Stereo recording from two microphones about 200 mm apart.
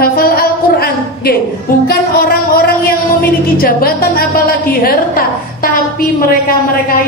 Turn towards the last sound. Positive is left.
turn(degrees=45)  # may be behind; listen again after turning